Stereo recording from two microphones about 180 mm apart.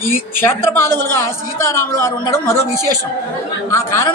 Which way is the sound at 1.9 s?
15° left (ahead or behind).